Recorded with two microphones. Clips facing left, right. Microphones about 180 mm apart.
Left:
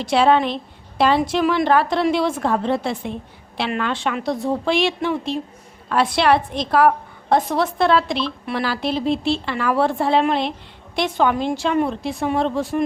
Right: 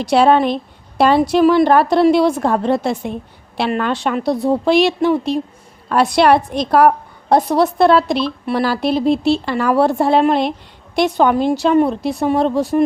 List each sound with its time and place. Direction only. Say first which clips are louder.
0.0 s a woman's voice: right 4 dB; 40° right (ahead or behind)